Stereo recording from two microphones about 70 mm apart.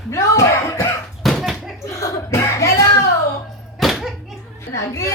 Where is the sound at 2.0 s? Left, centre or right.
Left.